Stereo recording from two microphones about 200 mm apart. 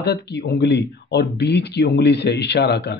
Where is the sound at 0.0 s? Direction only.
55° left (ahead or behind).